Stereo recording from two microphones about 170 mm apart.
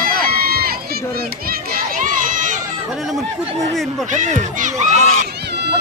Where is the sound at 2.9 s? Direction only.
Centre (ahead or behind).